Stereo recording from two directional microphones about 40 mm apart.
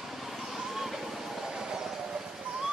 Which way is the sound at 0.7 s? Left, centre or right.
Centre.